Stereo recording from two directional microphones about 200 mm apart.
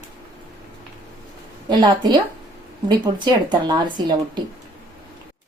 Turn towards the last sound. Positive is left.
turn(degrees=-25)  # may be behind; listen again after turning